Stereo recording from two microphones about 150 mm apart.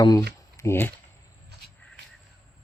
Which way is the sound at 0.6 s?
15° left (ahead or behind).